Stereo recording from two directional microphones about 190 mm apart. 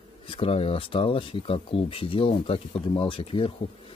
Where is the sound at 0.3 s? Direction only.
30° left (ahead or behind).